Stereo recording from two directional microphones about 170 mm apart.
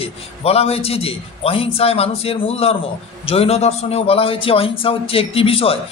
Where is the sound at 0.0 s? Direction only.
35° left (ahead or behind).